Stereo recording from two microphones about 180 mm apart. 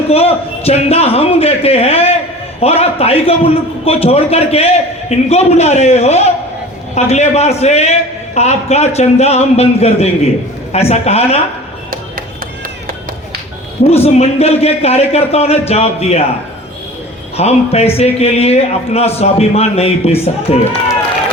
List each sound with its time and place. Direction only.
0.1 s a man's voice: 35° left (ahead or behind)
13.8 s a man's voice: 35° left (ahead or behind)
17.3 s a man's voice: 35° left (ahead or behind)